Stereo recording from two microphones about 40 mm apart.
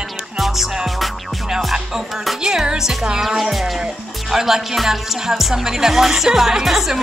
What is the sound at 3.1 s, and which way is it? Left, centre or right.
Speech, centre.